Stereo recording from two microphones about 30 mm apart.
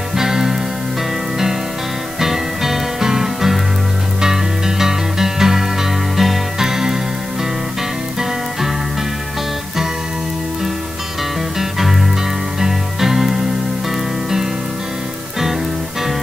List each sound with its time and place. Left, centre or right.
0.1 s music: centre
2.1 s music: centre
11.5 s music: centre